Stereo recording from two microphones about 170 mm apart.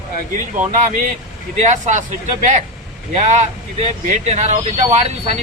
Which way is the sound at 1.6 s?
45° right (ahead or behind).